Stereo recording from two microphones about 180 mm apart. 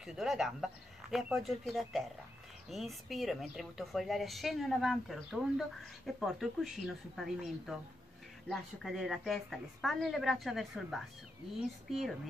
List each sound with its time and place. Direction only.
0.0 s a woman's voice: 5° right (ahead or behind)